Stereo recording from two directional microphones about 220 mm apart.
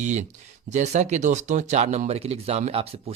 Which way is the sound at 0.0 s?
35° right (ahead or behind).